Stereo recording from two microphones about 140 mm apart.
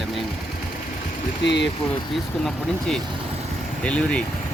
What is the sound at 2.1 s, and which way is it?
Speech, centre (ahead or behind).